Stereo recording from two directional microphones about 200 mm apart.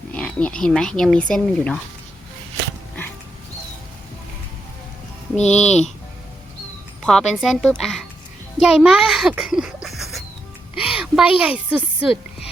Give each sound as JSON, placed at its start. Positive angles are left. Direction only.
{"t": 0.1, "sound": "speech", "side_deg": 5}
{"t": 5.4, "sound": "speech", "side_deg": 35}
{"t": 7.0, "sound": "a child's voice", "side_deg": 0}
{"t": 10.8, "sound": "a sound", "side_deg": -5}